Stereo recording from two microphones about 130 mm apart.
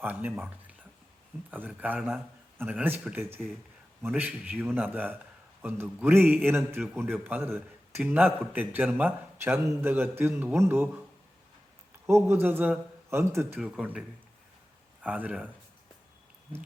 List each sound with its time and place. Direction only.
0.0 s speech: 15° right (ahead or behind)
12.0 s a man's voice: 20° right (ahead or behind)
13.6 s speech: 5° right (ahead or behind)
15.0 s speech: 10° right (ahead or behind)